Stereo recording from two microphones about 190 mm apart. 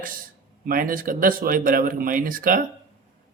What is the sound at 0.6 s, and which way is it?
Speech, 45° right (ahead or behind).